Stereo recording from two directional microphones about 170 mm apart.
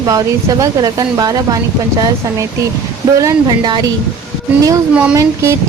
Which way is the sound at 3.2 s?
25° right (ahead or behind).